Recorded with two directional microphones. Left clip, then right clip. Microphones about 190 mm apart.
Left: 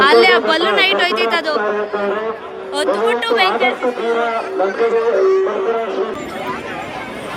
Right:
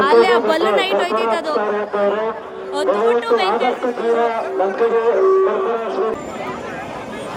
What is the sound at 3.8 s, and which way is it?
Speech, 45° left (ahead or behind).